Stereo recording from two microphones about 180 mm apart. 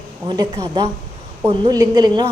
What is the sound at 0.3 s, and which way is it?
A woman's voice, 25° right (ahead or behind).